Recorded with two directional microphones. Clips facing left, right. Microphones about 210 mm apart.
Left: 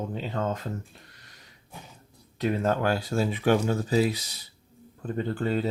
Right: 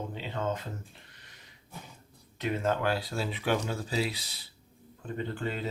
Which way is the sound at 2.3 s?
40° left (ahead or behind).